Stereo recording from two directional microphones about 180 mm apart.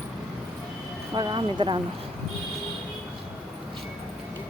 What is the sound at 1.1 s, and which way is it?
Speech, 25° right (ahead or behind).